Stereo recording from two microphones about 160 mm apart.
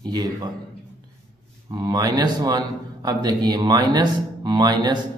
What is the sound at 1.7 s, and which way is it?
A man's voice, 25° right (ahead or behind).